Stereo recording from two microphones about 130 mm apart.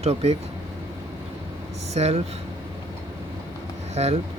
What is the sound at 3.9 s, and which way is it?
Speech, 55° right (ahead or behind).